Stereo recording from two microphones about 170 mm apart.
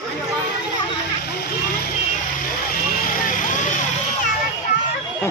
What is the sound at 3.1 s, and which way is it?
Vehicle, 50° left (ahead or behind).